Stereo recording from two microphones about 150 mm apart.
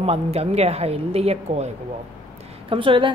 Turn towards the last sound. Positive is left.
turn(degrees=-35)  # may be behind; listen again after turning